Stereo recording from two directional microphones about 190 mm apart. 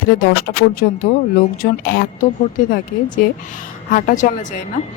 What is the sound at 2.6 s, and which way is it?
Speech, 45° left (ahead or behind).